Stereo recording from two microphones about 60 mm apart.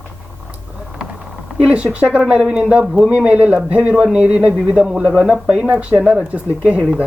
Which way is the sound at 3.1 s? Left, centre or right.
Right.